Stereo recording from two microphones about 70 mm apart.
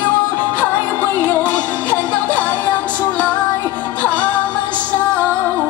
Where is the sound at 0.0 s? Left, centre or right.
Left.